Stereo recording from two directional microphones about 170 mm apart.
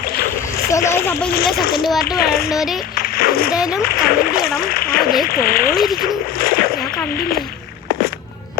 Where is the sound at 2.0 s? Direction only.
65° left (ahead or behind).